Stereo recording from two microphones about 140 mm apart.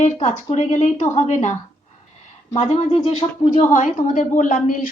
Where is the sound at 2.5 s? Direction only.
45° left (ahead or behind); by 4.8 s 60° left (ahead or behind).